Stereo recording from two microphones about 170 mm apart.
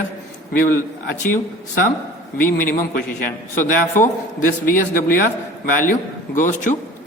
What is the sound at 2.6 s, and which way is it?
A man's voice, 55° left (ahead or behind).